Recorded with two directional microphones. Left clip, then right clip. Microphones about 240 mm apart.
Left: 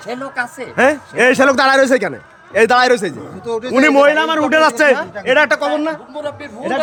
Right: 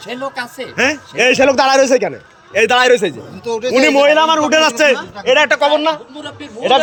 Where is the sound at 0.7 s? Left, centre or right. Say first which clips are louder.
Left 2 dB; centre.